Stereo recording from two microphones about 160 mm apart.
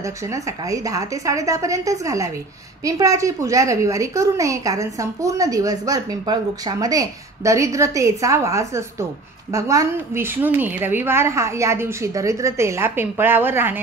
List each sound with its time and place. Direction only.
0.0 s a woman's voice: 20° right (ahead or behind)